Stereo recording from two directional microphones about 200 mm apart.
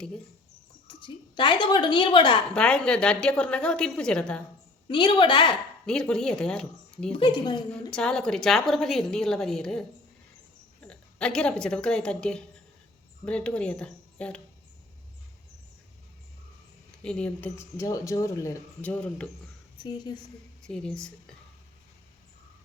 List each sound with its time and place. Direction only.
1.0 s a woman's voice: 25° left (ahead or behind)
2.5 s a woman's voice: 5° left (ahead or behind)
4.9 s a woman's voice: 25° left (ahead or behind)
5.8 s a woman's voice: 5° left (ahead or behind)
7.1 s a woman's voice: 25° left (ahead or behind)
7.7 s a woman's voice: 5° left (ahead or behind)
10.8 s a woman's voice: 5° left (ahead or behind)
17.0 s speech: 5° left (ahead or behind)
19.8 s a woman's voice: 20° left (ahead or behind)
20.7 s a woman's voice: 5° left (ahead or behind)